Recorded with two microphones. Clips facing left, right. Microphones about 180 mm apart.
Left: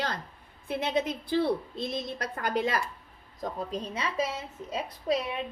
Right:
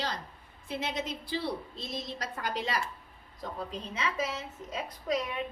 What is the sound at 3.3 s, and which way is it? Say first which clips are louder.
A woman's voice: left 5 dB; 40° left (ahead or behind).